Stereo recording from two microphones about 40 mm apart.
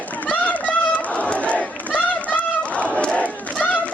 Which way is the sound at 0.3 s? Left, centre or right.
Left.